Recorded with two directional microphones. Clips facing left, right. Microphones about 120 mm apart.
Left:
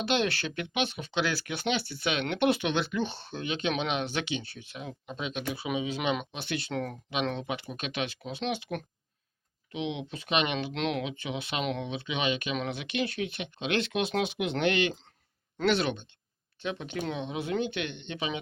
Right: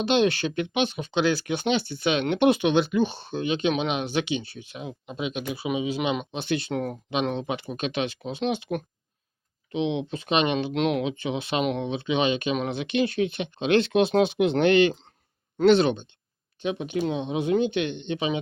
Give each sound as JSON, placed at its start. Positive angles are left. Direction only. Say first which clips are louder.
{"t": 0.0, "sound": "speech", "louder": "right 7 dB", "side_deg": -20}
{"t": 6.3, "sound": "speech", "louder": "right 6 dB", "side_deg": -25}